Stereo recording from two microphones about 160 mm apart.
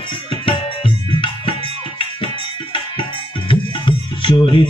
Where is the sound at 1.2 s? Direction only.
35° left (ahead or behind).